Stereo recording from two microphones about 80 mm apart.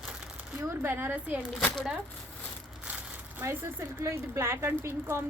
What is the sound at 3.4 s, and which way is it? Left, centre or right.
Speech, right.